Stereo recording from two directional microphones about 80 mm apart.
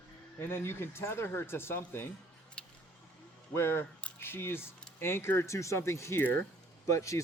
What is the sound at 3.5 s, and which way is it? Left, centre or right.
Speech, left.